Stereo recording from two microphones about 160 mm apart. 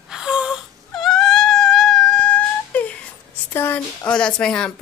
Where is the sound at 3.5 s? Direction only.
15° left (ahead or behind).